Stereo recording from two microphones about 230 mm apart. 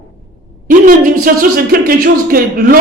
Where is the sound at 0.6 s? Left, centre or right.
Right.